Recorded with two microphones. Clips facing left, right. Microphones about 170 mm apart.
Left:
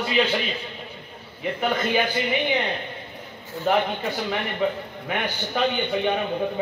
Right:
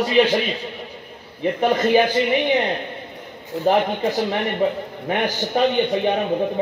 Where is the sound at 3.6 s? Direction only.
35° right (ahead or behind).